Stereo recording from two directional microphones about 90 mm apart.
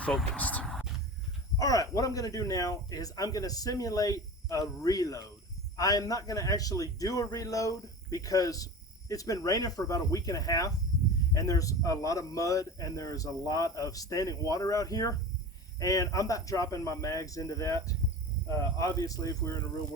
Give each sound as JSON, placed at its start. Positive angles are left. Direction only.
{"t": 0.0, "sound": "speech", "side_deg": 5}
{"t": 0.3, "sound": "speech", "side_deg": 15}
{"t": 0.6, "sound": "a sound", "side_deg": 0}
{"t": 1.5, "sound": "speech", "side_deg": 40}